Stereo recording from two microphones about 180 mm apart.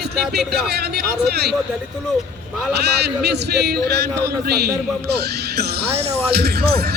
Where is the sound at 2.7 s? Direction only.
65° right (ahead or behind).